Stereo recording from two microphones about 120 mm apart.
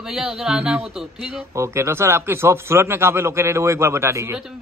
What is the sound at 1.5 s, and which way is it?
A man's voice, 25° right (ahead or behind).